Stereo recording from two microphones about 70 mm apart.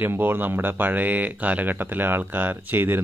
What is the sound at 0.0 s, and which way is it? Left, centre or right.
Speech, right.